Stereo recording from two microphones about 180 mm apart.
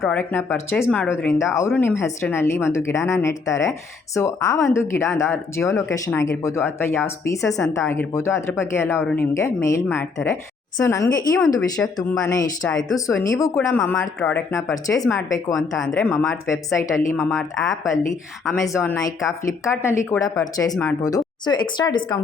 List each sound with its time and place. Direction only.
0.0 s speech: 5° left (ahead or behind)
11.3 s speech: centre (ahead or behind)
12.2 s speech: 15° left (ahead or behind)
16.1 s speech: centre (ahead or behind)
16.5 s speech: 15° left (ahead or behind)
17.3 s speech: centre (ahead or behind)
18.6 s speech: 15° left (ahead or behind)